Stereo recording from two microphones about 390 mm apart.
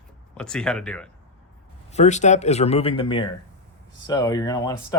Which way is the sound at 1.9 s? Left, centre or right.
Centre.